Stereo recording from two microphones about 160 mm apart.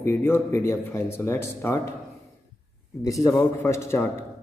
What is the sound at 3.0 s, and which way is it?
Speech, 20° left (ahead or behind).